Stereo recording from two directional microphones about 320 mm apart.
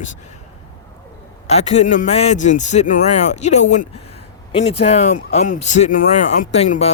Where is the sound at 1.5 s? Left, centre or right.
Centre.